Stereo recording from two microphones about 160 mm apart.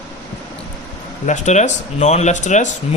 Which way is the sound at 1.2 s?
50° left (ahead or behind).